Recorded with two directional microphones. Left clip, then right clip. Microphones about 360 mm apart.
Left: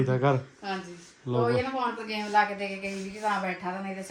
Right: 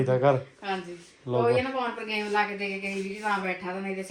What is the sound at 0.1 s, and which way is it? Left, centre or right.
A woman's voice, centre.